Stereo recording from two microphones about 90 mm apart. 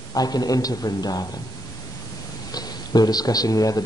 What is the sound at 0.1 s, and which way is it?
A man's voice, 45° left (ahead or behind).